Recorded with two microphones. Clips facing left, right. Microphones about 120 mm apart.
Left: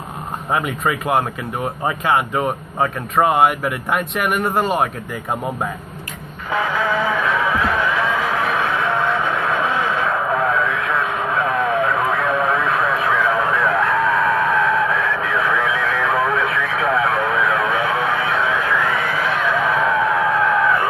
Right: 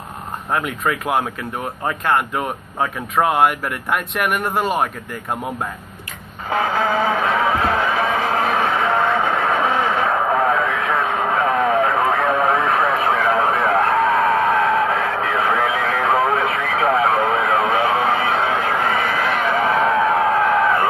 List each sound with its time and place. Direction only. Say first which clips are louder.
0.5 s speech: left 1 dB; centre (ahead or behind)
6.5 s music: right 1 dB; 40° right (ahead or behind)
19.7 s a sound: right 1 dB; 40° right (ahead or behind)